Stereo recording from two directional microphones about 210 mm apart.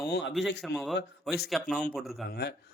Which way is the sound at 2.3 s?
50° left (ahead or behind).